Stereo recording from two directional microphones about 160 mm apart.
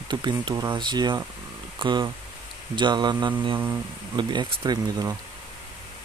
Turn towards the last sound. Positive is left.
turn(degrees=-25)  # may be behind; listen again after turning